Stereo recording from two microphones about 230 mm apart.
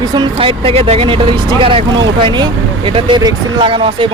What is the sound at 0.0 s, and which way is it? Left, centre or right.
Speech, centre.